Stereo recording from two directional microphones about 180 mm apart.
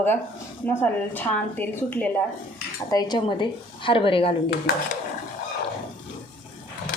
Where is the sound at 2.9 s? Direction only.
20° left (ahead or behind).